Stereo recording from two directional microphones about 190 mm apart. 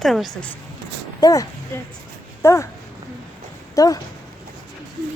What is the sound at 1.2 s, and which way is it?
A woman's voice, 20° left (ahead or behind).